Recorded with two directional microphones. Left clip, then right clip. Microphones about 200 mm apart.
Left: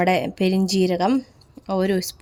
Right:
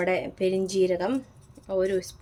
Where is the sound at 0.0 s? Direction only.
45° left (ahead or behind).